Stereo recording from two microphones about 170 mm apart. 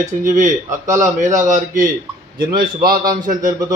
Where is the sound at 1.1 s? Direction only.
45° right (ahead or behind).